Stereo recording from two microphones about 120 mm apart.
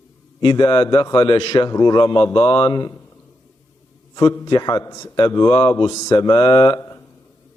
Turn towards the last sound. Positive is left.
turn(degrees=25)  # may be behind; listen again after turning